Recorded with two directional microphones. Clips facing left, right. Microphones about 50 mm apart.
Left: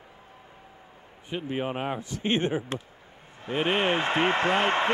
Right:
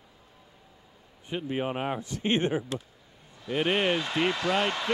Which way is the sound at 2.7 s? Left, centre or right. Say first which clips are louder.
Left 1 dB; left.